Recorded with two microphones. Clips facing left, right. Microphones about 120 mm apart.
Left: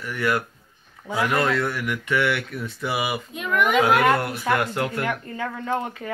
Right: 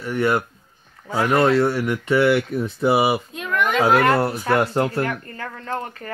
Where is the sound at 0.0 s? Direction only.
25° right (ahead or behind).